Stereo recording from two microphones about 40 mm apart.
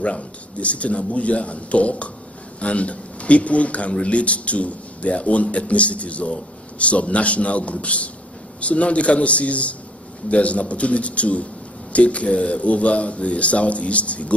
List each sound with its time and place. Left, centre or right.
0.0 s speech: left